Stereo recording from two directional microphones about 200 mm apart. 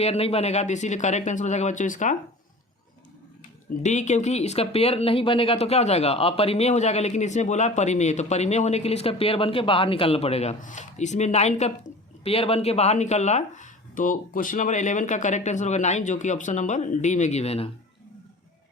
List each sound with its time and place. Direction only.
0.0 s speech: 30° left (ahead or behind)
3.8 s speech: 35° left (ahead or behind)